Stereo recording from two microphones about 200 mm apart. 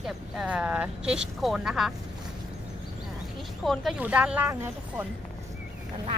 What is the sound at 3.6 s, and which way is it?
Speech, 5° right (ahead or behind).